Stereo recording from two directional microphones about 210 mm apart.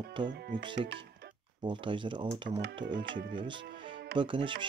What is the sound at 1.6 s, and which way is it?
Speech, 25° right (ahead or behind).